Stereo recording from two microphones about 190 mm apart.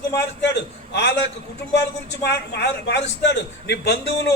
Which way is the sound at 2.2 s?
60° left (ahead or behind).